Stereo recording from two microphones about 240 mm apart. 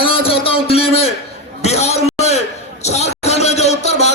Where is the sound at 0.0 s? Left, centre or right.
Left.